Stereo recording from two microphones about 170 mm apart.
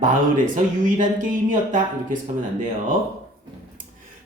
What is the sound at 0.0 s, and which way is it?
Speech, 50° right (ahead or behind).